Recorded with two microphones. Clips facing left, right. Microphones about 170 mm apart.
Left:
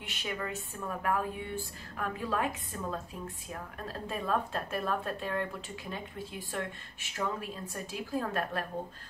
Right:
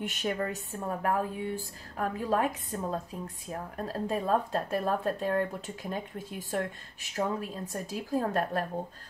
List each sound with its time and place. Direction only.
0.0 s speech: 45° right (ahead or behind)